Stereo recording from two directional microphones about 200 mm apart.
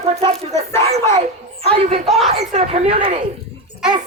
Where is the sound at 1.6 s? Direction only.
30° right (ahead or behind).